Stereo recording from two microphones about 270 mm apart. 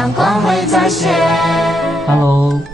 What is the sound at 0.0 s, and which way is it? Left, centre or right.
Music, centre.